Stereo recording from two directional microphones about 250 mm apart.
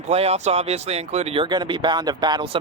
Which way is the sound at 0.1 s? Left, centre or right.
Right.